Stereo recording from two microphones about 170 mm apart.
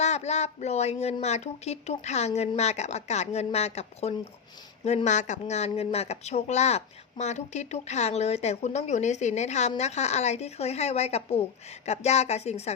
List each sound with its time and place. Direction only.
0.0 s a woman's voice: 40° left (ahead or behind)